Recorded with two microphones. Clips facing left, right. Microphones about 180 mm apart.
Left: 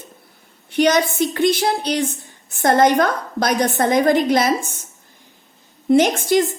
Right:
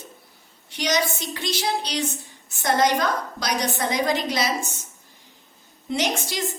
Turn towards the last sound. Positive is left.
turn(degrees=55)  # may be behind; listen again after turning